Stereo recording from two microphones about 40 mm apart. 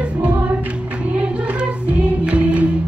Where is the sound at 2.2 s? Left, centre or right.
Right.